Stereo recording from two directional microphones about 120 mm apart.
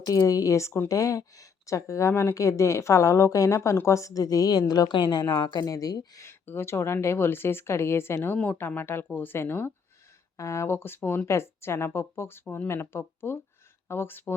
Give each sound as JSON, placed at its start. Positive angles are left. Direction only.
{"t": 0.0, "sound": "speech", "side_deg": 30}